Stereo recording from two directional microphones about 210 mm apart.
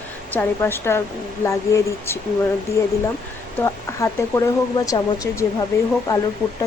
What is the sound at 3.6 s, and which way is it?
Speech, 15° left (ahead or behind).